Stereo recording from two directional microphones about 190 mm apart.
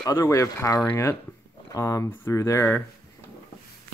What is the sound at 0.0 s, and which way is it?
Speech, 20° left (ahead or behind).